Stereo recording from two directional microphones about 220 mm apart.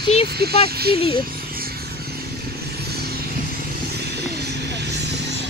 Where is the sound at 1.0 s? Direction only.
25° left (ahead or behind).